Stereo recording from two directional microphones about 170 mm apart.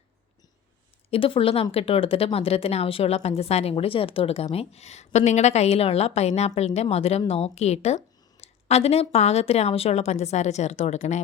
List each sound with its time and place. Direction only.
1.1 s a woman's voice: 30° left (ahead or behind)